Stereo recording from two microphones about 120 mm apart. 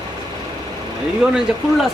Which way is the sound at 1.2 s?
10° right (ahead or behind).